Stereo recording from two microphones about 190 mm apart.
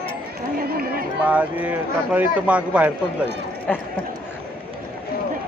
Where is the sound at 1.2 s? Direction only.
5° right (ahead or behind).